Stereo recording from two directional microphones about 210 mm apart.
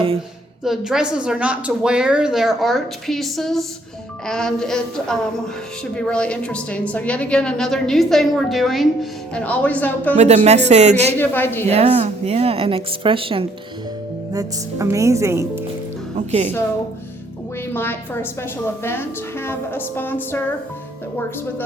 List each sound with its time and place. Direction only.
0.6 s a woman's voice: centre (ahead or behind)
10.2 s speech: 30° right (ahead or behind)
11.2 s a woman's voice: 10° left (ahead or behind)
11.7 s a woman's voice: 30° right (ahead or behind)
14.3 s speech: 15° right (ahead or behind)
16.1 s speech: 35° right (ahead or behind)
17.7 s a woman's voice: 10° left (ahead or behind)